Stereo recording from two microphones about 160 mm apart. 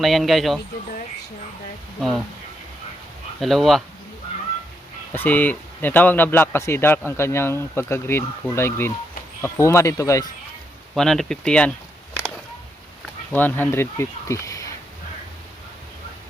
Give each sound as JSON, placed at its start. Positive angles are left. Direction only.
{"t": 0.0, "sound": "speech", "side_deg": 0}
{"t": 2.0, "sound": "speech", "side_deg": 0}
{"t": 3.4, "sound": "speech", "side_deg": 0}
{"t": 5.1, "sound": "a man's voice", "side_deg": 10}
{"t": 10.9, "sound": "speech", "side_deg": 5}
{"t": 13.3, "sound": "a man's voice", "side_deg": 10}